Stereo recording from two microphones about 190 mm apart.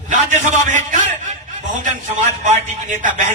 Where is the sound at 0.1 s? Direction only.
40° right (ahead or behind).